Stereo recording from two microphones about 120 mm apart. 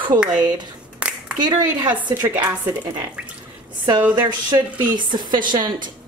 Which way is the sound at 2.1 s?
20° right (ahead or behind).